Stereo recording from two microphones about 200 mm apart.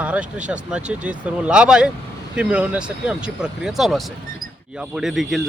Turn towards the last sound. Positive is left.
turn(degrees=0)  # may be behind; listen again after turning